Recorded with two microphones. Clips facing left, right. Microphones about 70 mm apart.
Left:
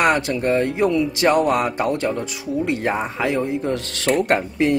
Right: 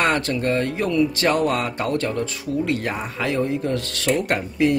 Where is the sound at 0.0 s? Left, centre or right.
Centre.